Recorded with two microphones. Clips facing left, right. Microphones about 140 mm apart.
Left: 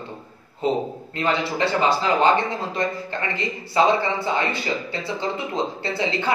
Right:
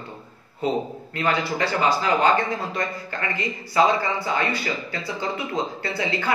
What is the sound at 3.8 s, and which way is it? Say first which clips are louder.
Speech: left 1 dB; 25° left (ahead or behind).